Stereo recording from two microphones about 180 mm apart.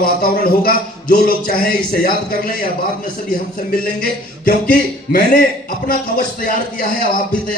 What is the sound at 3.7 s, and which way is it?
A man's voice, 50° left (ahead or behind).